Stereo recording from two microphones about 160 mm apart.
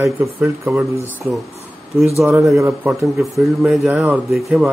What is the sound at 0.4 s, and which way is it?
Speech, 5° right (ahead or behind).